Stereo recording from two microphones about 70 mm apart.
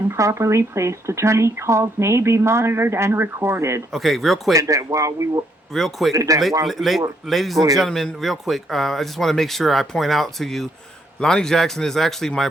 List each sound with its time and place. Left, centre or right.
0.1 s speech: right
3.9 s speech: centre
4.5 s speech: right
5.7 s speech: centre
6.1 s speech: right
6.7 s speech: centre